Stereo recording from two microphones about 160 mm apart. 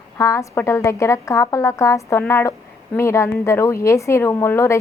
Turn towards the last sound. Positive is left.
turn(degrees=15)  # may be behind; listen again after turning